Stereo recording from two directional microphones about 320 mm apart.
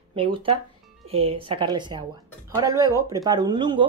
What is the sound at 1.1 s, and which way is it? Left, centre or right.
A woman's voice, centre.